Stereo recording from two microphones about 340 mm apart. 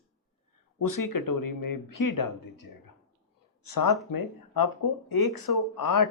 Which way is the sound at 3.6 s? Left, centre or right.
Left.